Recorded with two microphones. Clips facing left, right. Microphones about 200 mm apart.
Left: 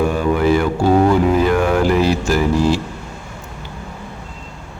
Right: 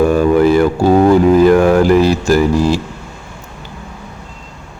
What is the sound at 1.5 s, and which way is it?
Speech, 40° right (ahead or behind).